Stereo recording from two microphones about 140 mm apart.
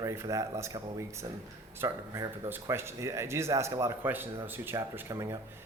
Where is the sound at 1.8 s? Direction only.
20° right (ahead or behind).